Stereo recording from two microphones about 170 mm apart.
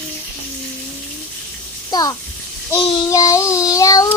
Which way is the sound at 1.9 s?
20° left (ahead or behind).